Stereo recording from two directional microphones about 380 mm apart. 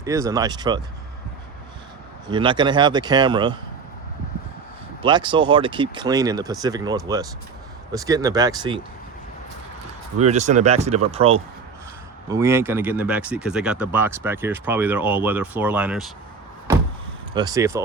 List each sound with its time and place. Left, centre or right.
0.0 s speech: centre
2.2 s speech: centre
5.0 s speech: centre
10.2 s speech: centre
17.3 s speech: centre